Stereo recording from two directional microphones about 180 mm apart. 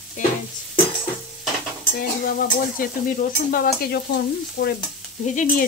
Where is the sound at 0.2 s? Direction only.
45° left (ahead or behind).